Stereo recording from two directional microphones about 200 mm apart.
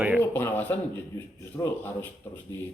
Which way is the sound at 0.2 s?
10° left (ahead or behind).